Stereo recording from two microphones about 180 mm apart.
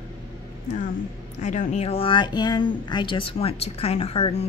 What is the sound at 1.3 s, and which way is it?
Speech, 40° left (ahead or behind).